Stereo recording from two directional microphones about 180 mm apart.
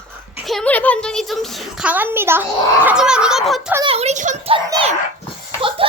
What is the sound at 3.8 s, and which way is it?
Speech, 35° right (ahead or behind).